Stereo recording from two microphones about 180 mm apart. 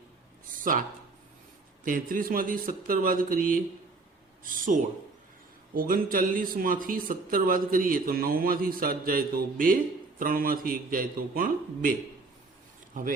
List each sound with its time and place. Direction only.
0.5 s speech: 50° right (ahead or behind)